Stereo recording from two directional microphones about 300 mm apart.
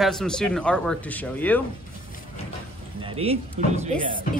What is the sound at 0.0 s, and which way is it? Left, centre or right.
Speech, centre.